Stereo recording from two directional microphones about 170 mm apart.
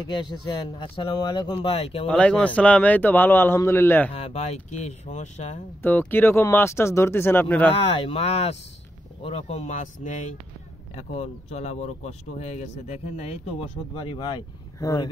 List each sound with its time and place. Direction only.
0.1 s speech: 25° left (ahead or behind)
2.0 s a man's voice: 5° left (ahead or behind)
4.1 s speech: 40° left (ahead or behind)
5.8 s a man's voice: 10° left (ahead or behind)
7.7 s speech: 35° left (ahead or behind)